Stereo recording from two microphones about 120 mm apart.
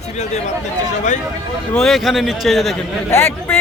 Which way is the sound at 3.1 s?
20° left (ahead or behind).